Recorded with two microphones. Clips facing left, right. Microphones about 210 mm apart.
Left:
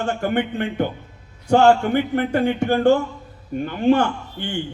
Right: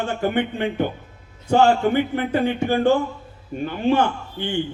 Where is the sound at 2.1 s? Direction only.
50° left (ahead or behind).